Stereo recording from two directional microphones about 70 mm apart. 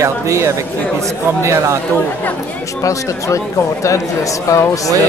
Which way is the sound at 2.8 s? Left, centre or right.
Left.